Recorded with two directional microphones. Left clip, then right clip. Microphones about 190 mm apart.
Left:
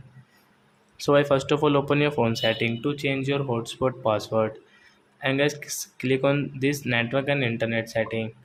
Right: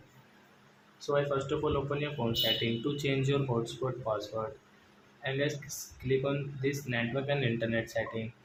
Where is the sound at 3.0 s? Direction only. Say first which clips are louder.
Left 5 dB; 25° left (ahead or behind).